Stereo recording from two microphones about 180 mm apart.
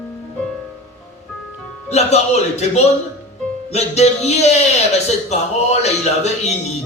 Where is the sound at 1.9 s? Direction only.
35° left (ahead or behind).